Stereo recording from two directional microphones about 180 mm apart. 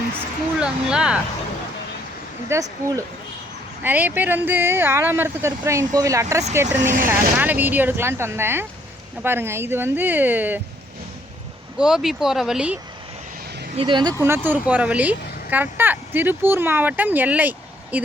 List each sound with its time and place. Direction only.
0.6 s speech: 5° right (ahead or behind)
2.5 s speech: 15° right (ahead or behind)
6.7 s speech: 45° right (ahead or behind)
7.1 s speech: 10° right (ahead or behind)
11.8 s speech: 5° right (ahead or behind)
13.7 s speech: 25° right (ahead or behind)
14.3 s speech: 10° right (ahead or behind)